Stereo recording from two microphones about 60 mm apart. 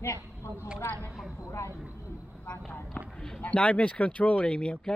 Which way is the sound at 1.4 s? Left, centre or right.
Left.